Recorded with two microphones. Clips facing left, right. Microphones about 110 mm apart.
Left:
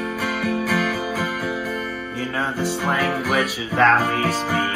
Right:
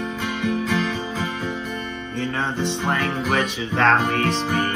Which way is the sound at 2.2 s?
5° left (ahead or behind).